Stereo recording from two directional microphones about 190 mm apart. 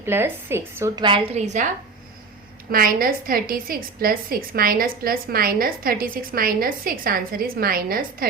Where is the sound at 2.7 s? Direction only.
50° right (ahead or behind).